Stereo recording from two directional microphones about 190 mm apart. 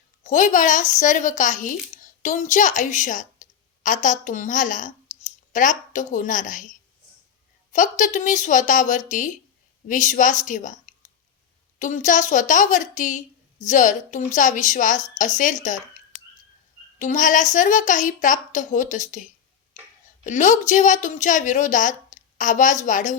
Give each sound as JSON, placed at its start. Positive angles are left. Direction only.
{"t": 0.2, "sound": "speech", "side_deg": 40}
{"t": 11.8, "sound": "a woman's voice", "side_deg": 40}
{"t": 17.0, "sound": "a woman's voice", "side_deg": 40}